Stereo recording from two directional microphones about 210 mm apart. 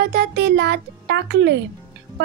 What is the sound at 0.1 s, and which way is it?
A child's voice, 45° right (ahead or behind).